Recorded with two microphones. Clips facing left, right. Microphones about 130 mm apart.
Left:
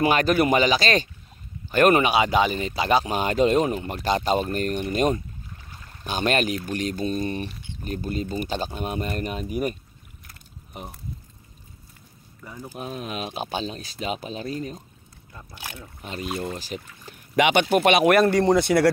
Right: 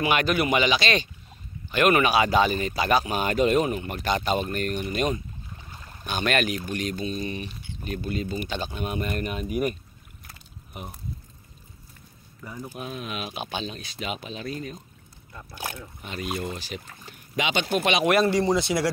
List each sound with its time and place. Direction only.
0.0 s speech: 40° left (ahead or behind)
2.0 s speech: 20° left (ahead or behind); by 5.2 s 40° left (ahead or behind)
6.0 s speech: 30° left (ahead or behind)
12.7 s speech: 35° left (ahead or behind)
16.0 s speech: 35° left (ahead or behind)
17.4 s speech: 60° left (ahead or behind)